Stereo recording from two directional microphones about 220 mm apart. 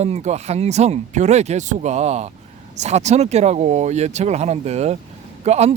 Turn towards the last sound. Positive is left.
turn(degrees=-30)  # may be behind; listen again after turning